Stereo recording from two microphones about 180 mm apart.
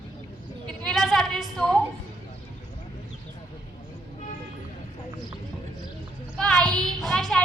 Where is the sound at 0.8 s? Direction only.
Centre (ahead or behind).